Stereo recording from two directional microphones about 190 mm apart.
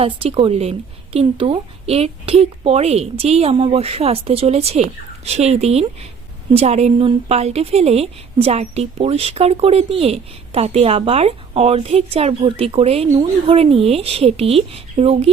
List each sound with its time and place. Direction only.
0.0 s a woman's voice: 30° right (ahead or behind)